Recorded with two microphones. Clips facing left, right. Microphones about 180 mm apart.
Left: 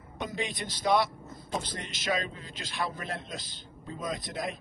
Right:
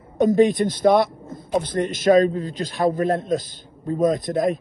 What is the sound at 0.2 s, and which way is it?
Speech, 45° right (ahead or behind).